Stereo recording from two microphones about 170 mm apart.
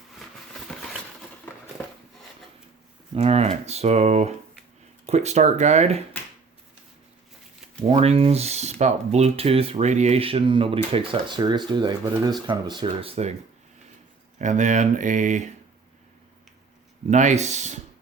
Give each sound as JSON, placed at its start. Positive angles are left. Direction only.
{"t": 3.2, "sound": "speech", "side_deg": -35}
{"t": 7.9, "sound": "speech", "side_deg": -35}
{"t": 14.3, "sound": "speech", "side_deg": -45}
{"t": 17.1, "sound": "speech", "side_deg": -45}